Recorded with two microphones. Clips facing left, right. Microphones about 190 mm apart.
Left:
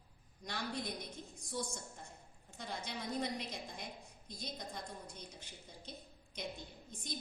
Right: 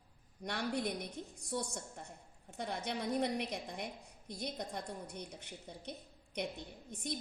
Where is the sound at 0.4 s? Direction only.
65° right (ahead or behind).